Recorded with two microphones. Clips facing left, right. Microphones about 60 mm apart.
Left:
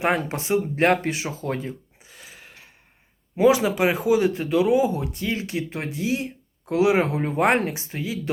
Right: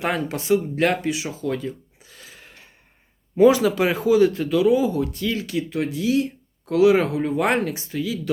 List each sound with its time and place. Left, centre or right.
0.0 s speech: left
2.0 s a sound: centre
3.3 s speech: centre; by 7.2 s left
7.2 s speech: left